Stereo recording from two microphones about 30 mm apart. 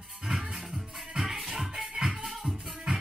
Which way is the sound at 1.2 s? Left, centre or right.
Centre.